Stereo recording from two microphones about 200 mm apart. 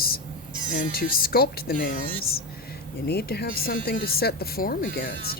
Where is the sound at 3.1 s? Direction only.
50° left (ahead or behind).